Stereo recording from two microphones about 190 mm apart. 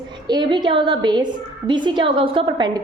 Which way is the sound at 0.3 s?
25° right (ahead or behind).